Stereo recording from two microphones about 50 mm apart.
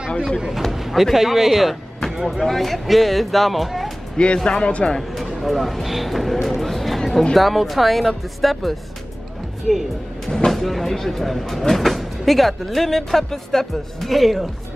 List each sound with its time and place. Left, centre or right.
0.6 s speech: centre
4.5 s a man's voice: left
4.9 s speech: centre
10.3 s speech: centre